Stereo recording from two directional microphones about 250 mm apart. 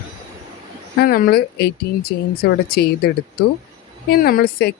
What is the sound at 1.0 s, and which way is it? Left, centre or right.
Speech, left.